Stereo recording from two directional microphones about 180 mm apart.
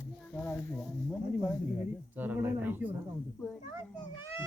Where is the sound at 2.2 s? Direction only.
10° right (ahead or behind).